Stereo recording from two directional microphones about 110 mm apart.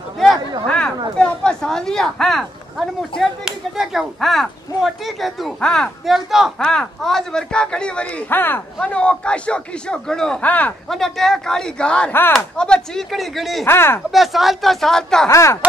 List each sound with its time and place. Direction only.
0.7 s a sound: 10° left (ahead or behind)
1.1 s speech: 5° left (ahead or behind)
10.9 s speech: 5° left (ahead or behind)
13.7 s speech: 20° left (ahead or behind)
14.1 s speech: centre (ahead or behind)
15.2 s speech: 25° left (ahead or behind)